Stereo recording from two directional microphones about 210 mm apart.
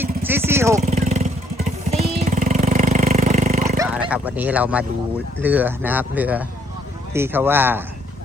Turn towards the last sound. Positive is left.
turn(degrees=-10)  # may be behind; listen again after turning